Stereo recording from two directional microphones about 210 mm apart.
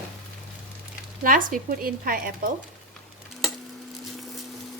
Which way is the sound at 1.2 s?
40° right (ahead or behind).